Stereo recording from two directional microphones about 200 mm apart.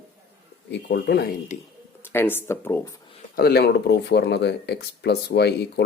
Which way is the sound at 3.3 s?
50° left (ahead or behind).